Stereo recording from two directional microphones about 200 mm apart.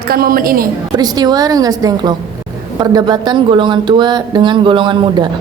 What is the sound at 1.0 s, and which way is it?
Speech, 20° right (ahead or behind).